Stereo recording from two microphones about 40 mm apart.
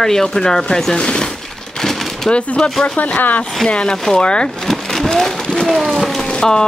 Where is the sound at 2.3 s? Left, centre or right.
Left.